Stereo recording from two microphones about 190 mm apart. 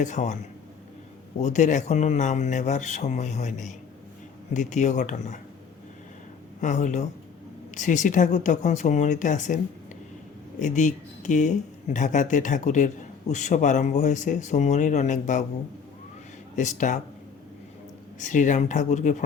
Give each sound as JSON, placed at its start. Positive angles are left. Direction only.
{"t": 0.0, "sound": "a man's voice", "side_deg": 40}
{"t": 1.4, "sound": "a man's voice", "side_deg": 40}
{"t": 6.6, "sound": "a man's voice", "side_deg": 40}
{"t": 10.6, "sound": "a man's voice", "side_deg": 40}
{"t": 16.6, "sound": "a man's voice", "side_deg": 40}
{"t": 18.2, "sound": "a man's voice", "side_deg": 40}